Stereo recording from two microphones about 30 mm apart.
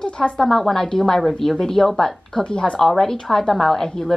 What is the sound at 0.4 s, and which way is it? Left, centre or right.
Speech, centre.